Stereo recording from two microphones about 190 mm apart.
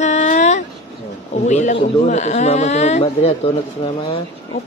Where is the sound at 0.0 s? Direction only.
40° left (ahead or behind).